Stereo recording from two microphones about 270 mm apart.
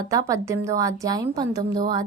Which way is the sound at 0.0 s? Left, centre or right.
Centre.